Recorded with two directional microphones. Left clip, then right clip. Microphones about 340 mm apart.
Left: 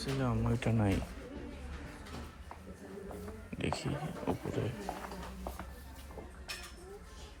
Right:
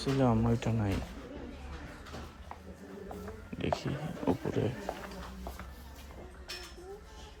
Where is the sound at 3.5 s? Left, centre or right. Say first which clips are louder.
Right 3 dB; centre.